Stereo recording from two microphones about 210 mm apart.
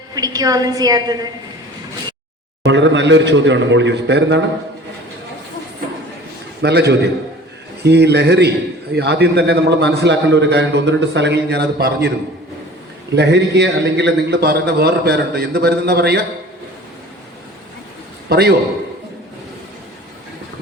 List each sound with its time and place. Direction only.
0.1 s a woman's voice: 15° right (ahead or behind)
2.6 s a man's voice: 60° right (ahead or behind)
6.6 s a man's voice: 50° right (ahead or behind)
13.1 s a man's voice: 55° right (ahead or behind)
18.3 s a man's voice: 50° right (ahead or behind)